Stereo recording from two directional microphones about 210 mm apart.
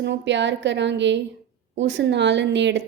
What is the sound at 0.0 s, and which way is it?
A woman's voice, 55° right (ahead or behind).